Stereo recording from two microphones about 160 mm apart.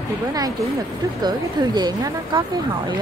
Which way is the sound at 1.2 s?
25° right (ahead or behind).